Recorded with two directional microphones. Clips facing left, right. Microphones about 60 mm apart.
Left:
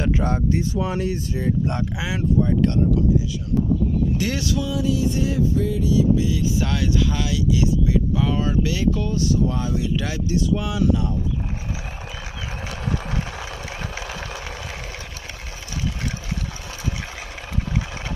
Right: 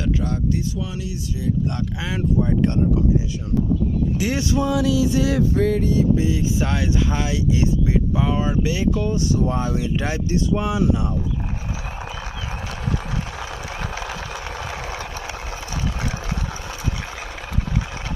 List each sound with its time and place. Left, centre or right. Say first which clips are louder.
0.0 s speech: left 1 dB; left
2.0 s speech: even; centre
2.4 s speech: even; centre
4.2 s speech: right 2 dB; right
4.7 s music: right 3 dB; right
6.1 s speech: right 1 dB; right